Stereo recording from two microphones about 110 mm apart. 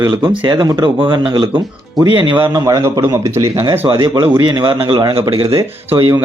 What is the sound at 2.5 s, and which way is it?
Speech, 35° right (ahead or behind).